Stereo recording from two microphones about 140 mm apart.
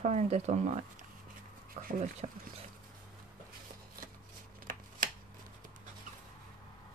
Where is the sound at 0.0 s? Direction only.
55° right (ahead or behind).